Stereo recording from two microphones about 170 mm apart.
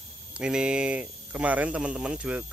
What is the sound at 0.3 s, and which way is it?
Speech, 5° right (ahead or behind).